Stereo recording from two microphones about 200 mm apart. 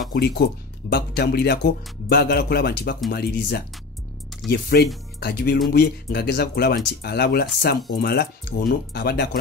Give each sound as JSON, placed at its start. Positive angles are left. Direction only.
{"t": 0.1, "sound": "speech", "side_deg": 50}